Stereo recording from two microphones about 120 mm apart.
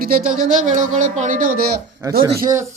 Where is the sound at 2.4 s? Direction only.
25° right (ahead or behind).